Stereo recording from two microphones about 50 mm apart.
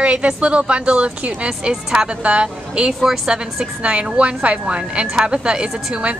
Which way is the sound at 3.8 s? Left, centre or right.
Right.